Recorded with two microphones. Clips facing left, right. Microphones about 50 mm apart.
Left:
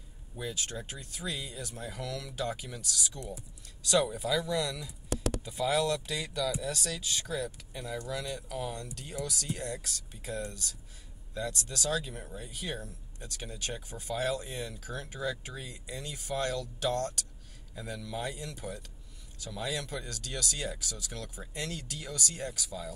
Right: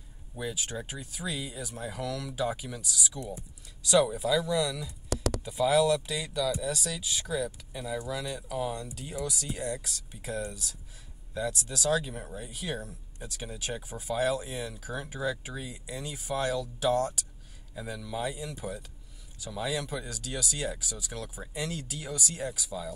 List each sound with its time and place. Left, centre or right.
0.4 s speech: centre
5.1 s a sound: right
5.4 s speech: centre